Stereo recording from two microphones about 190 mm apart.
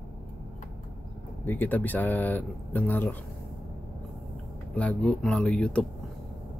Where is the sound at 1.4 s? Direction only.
10° left (ahead or behind).